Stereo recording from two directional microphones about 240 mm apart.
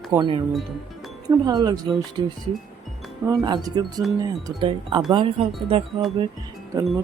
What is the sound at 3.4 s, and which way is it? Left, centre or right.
Speech, centre.